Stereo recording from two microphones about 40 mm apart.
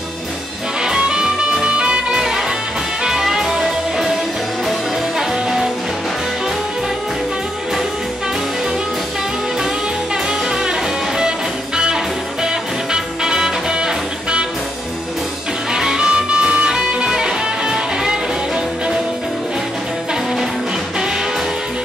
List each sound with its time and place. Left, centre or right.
0.8 s music: right
3.2 s music: centre
11.1 s music: centre
15.7 s music: centre